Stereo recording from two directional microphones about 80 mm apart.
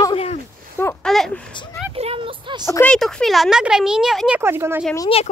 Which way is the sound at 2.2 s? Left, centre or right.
Right.